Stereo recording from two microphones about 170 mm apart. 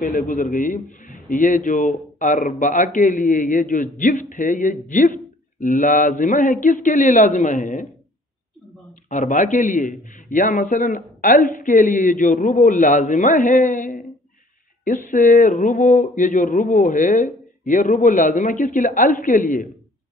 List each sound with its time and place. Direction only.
0.0 s a man's voice: 50° left (ahead or behind)
9.1 s a man's voice: 45° left (ahead or behind)